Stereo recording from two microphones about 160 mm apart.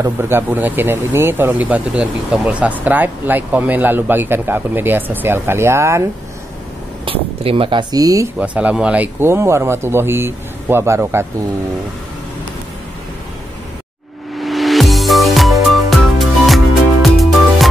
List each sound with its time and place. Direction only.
0.0 s speech: 15° right (ahead or behind)
7.1 s speech: 35° right (ahead or behind)
8.4 s speech: 10° right (ahead or behind)
14.4 s music: centre (ahead or behind)